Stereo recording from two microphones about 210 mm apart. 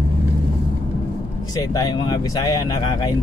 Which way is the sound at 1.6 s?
15° left (ahead or behind).